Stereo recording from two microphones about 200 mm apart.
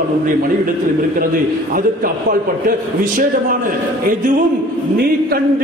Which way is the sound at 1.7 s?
45° right (ahead or behind).